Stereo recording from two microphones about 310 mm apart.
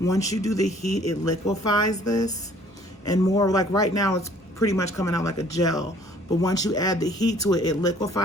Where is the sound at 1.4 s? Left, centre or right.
Left.